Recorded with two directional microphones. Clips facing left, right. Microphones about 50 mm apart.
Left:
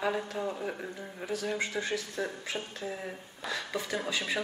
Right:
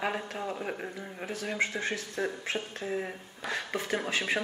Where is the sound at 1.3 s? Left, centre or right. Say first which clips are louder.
Right 1 dB; right.